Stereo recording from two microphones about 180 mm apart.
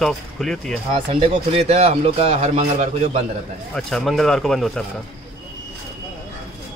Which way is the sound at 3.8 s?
Centre (ahead or behind).